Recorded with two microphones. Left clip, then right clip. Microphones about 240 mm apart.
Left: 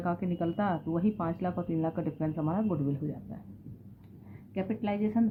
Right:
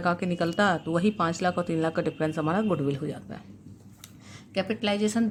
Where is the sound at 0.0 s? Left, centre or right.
Right.